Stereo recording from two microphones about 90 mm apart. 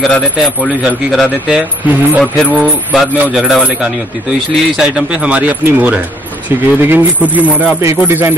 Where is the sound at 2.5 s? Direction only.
15° right (ahead or behind).